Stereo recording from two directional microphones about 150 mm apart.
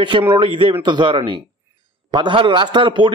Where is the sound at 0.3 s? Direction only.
35° right (ahead or behind).